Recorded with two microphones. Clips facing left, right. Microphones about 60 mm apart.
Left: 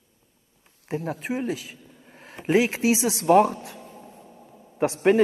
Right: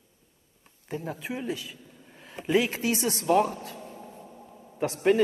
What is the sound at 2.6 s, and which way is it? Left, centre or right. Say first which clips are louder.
Speech: left 6 dB; left.